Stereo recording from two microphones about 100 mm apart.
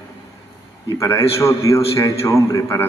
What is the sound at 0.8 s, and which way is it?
A man's voice, 30° left (ahead or behind).